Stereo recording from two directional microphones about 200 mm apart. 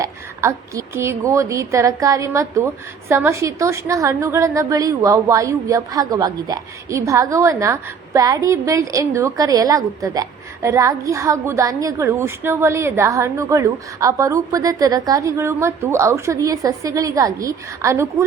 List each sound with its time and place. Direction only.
0.0 s a woman's voice: 15° right (ahead or behind)